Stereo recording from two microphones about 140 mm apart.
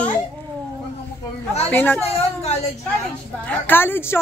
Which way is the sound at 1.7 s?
15° left (ahead or behind).